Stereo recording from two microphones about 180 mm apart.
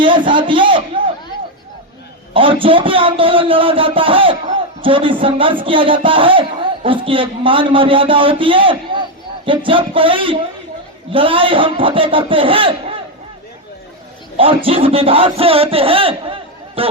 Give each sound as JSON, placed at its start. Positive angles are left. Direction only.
{"t": 0.0, "sound": "a man's voice", "side_deg": -25}
{"t": 2.3, "sound": "a man's voice", "side_deg": -30}
{"t": 14.3, "sound": "speech", "side_deg": -30}